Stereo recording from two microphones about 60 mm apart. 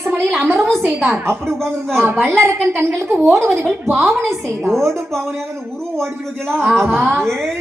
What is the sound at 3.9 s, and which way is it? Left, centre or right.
Speech, centre.